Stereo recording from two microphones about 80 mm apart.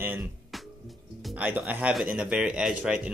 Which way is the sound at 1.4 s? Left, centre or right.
Right.